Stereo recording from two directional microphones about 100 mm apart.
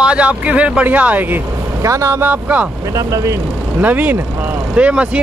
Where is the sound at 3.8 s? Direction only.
15° right (ahead or behind).